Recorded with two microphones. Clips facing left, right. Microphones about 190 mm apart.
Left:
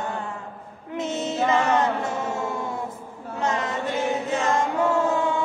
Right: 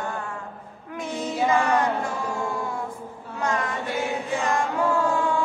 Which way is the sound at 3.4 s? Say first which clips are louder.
Left 1 dB; 25° left (ahead or behind).